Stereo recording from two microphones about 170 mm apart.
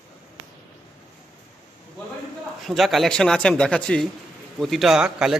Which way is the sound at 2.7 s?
Centre (ahead or behind).